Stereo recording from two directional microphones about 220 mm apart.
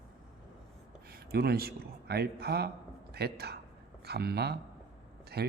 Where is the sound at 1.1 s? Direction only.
45° right (ahead or behind).